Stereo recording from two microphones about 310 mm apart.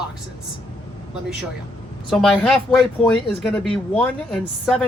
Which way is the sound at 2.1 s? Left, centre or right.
Centre.